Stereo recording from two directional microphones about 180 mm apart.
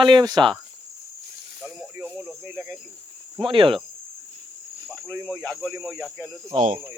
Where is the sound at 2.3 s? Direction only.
5° right (ahead or behind).